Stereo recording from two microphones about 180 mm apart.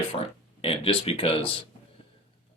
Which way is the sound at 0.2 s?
30° left (ahead or behind).